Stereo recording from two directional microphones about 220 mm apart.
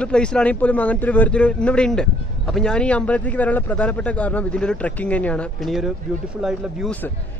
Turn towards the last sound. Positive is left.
turn(degrees=5)  # may be behind; listen again after turning